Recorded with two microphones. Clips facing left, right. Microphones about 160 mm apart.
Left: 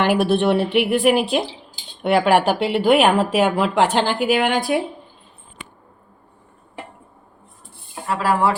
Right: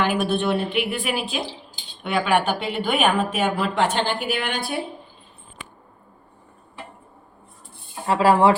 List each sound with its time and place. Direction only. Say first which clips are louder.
0.0 s a woman's voice: left 5 dB; 75° left (ahead or behind)
8.0 s speech: right 3 dB; 25° right (ahead or behind)